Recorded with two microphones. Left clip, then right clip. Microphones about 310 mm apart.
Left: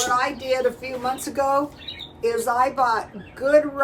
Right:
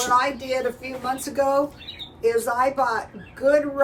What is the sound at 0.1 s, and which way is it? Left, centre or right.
Speech, centre.